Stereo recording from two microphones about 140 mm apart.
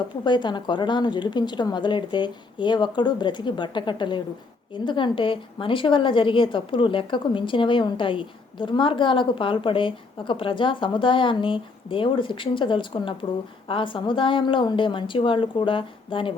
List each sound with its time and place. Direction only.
0.3 s a woman's voice: 35° left (ahead or behind)